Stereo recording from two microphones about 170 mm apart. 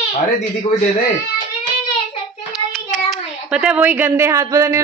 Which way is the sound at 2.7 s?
Centre (ahead or behind).